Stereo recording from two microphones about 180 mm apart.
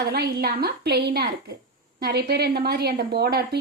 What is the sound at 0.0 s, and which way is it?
A woman's voice, 65° right (ahead or behind).